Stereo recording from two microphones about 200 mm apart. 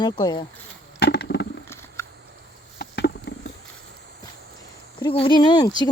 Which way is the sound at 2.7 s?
55° left (ahead or behind).